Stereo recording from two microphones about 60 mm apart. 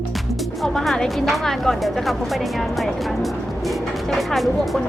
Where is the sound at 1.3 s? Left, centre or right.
Centre.